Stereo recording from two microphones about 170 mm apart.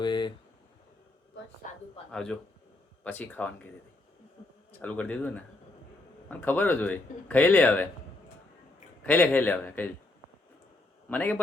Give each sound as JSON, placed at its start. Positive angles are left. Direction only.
{"t": 0.0, "sound": "a sound", "side_deg": 25}
{"t": 2.1, "sound": "speech", "side_deg": 5}
{"t": 4.8, "sound": "speech", "side_deg": 10}
{"t": 9.0, "sound": "speech", "side_deg": 10}
{"t": 11.1, "sound": "speech", "side_deg": 10}